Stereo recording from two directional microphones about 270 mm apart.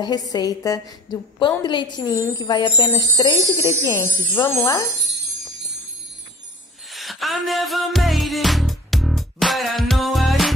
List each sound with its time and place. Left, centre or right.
0.0 s speech: centre
6.9 s music: centre